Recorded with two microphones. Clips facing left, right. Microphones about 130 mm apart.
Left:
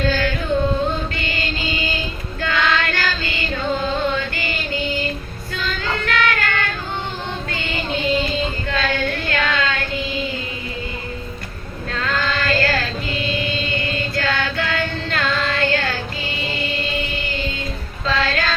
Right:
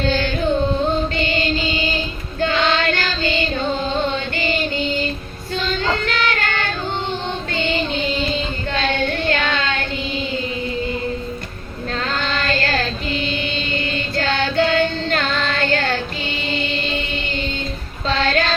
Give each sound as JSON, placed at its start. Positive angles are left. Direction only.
{"t": 0.0, "sound": "carnatic music", "side_deg": -25}
{"t": 1.1, "sound": "music", "side_deg": -25}
{"t": 2.4, "sound": "child singing", "side_deg": -25}
{"t": 11.9, "sound": "music", "side_deg": -30}
{"t": 18.1, "sound": "music", "side_deg": -30}